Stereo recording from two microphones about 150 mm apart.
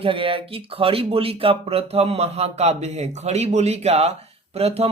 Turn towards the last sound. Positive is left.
turn(degrees=-45)  # may be behind; listen again after turning